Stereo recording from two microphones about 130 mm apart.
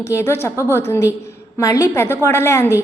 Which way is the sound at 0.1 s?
20° left (ahead or behind).